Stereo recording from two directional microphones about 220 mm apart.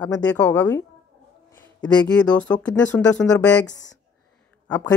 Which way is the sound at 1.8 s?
20° left (ahead or behind).